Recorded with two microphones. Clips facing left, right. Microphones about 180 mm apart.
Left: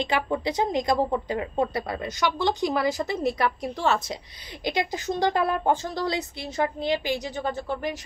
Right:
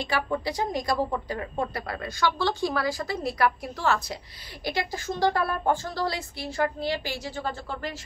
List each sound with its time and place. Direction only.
0.0 s a woman's voice: 20° left (ahead or behind)